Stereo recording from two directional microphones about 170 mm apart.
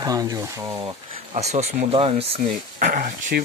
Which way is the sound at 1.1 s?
40° right (ahead or behind).